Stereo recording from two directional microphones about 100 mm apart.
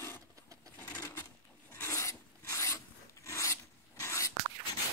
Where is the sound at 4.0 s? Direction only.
30° left (ahead or behind).